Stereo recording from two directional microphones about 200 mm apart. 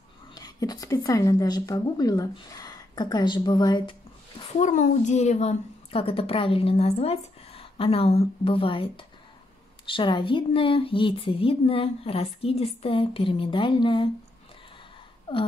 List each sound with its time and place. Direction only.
0.3 s speech: 20° left (ahead or behind)
4.6 s a woman's voice: 40° left (ahead or behind)
15.3 s a sound: 25° left (ahead or behind)